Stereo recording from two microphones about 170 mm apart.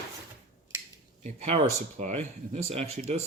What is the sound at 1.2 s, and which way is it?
Speech, 40° right (ahead or behind).